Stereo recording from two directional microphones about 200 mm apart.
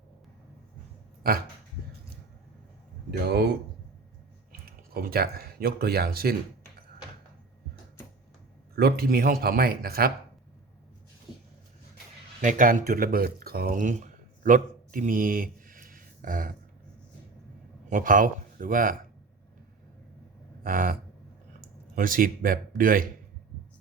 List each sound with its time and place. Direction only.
3.1 s speech: 55° right (ahead or behind)
5.0 s speech: 50° right (ahead or behind)
8.7 s speech: 50° right (ahead or behind)
12.4 s speech: 40° right (ahead or behind)
17.8 s speech: 40° right (ahead or behind)
20.7 s speech: 45° right (ahead or behind)